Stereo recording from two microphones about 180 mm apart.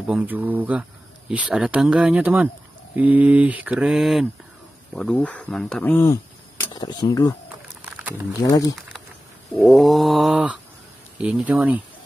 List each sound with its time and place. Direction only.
0.0 s speech: 10° right (ahead or behind); by 6.1 s 10° left (ahead or behind)
6.7 s speech: 25° left (ahead or behind)
7.8 s a sound: 10° right (ahead or behind)
8.4 s speech: 20° left (ahead or behind)
9.6 s cat: centre (ahead or behind)
11.1 s speech: 5° right (ahead or behind)